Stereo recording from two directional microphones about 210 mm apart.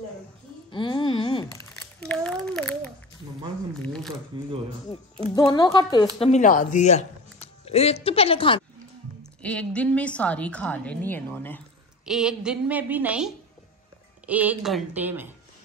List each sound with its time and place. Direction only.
0.7 s a sound: 20° left (ahead or behind)
2.0 s a sound: 5° left (ahead or behind)
3.8 s shuffling cards: 5° left (ahead or behind)
4.3 s speech: 20° right (ahead or behind)
5.3 s a woman's voice: 20° left (ahead or behind)
6.1 s speech: 30° left (ahead or behind)
9.4 s a woman's voice: 5° left (ahead or behind)
12.1 s a woman's voice: 5° right (ahead or behind)